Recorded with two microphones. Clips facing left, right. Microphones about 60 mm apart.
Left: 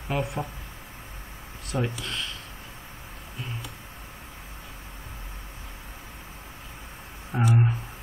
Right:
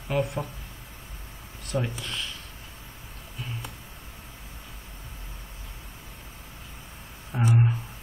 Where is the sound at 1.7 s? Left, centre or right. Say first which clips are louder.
Left 1 dB; centre.